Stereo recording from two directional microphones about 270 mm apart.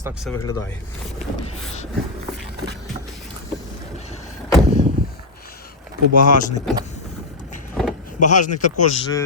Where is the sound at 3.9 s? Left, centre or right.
Left.